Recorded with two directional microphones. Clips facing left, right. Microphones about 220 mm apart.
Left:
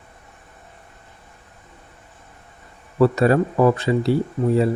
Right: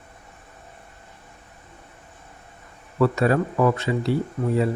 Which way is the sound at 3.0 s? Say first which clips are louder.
Left 4 dB; 35° left (ahead or behind).